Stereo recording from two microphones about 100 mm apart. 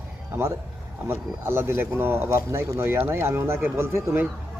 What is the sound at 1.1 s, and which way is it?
A man's voice, 25° right (ahead or behind).